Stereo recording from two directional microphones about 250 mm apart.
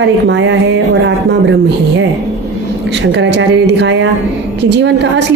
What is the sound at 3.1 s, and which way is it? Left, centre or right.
A woman's voice, right.